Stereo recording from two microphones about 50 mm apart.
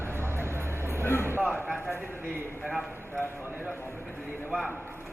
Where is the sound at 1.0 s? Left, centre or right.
Left.